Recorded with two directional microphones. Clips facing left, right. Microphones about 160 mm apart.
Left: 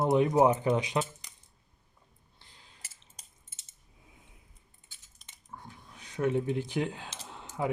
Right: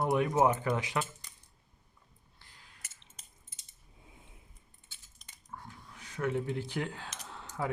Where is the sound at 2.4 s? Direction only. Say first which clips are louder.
Left 1 dB; 25° left (ahead or behind).